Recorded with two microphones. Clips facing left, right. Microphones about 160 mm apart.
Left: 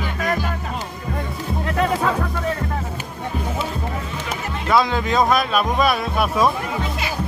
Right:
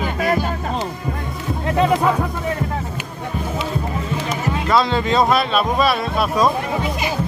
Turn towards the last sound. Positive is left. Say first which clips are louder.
# right 1 dB
turn(degrees=0)  # may be behind; listen again after turning